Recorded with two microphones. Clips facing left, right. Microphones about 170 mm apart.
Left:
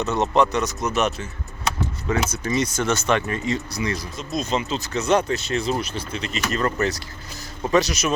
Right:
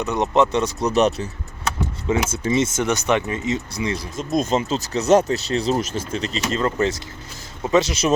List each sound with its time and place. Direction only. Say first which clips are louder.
0.0 s speech: right 1 dB; 15° right (ahead or behind); by 1.1 s 35° right (ahead or behind)
2.0 s speech: right 3 dB; 25° right (ahead or behind)
4.2 s speech: right 6 dB; 45° right (ahead or behind)
6.5 s speech: right 2 dB; 25° right (ahead or behind)